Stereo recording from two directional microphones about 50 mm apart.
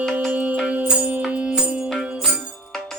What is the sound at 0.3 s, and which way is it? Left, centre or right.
Music, right.